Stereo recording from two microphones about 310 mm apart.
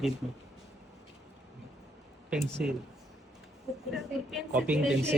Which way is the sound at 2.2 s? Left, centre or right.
Centre.